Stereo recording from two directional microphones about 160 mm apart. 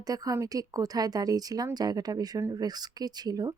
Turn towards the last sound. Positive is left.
turn(degrees=-25)  # may be behind; listen again after turning